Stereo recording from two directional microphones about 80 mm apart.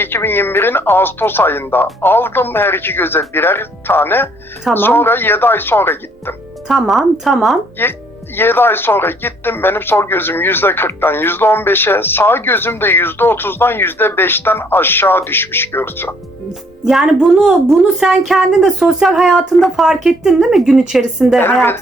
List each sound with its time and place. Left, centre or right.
0.0 s speech: left
6.7 s a woman's voice: centre
7.8 s speech: left
16.8 s a woman's voice: centre